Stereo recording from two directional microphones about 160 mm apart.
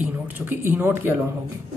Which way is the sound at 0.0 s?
10° right (ahead or behind).